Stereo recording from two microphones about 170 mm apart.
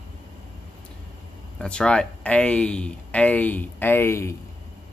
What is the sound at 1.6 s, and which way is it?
Speech, 5° left (ahead or behind).